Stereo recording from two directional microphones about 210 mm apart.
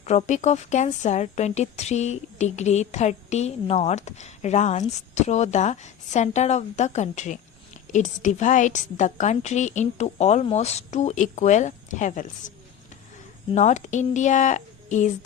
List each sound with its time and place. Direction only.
0.0 s a woman's voice: 35° left (ahead or behind)
13.5 s a woman's voice: 35° left (ahead or behind)